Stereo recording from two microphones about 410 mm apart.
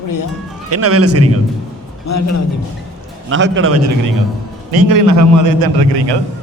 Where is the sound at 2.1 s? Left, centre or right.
Left.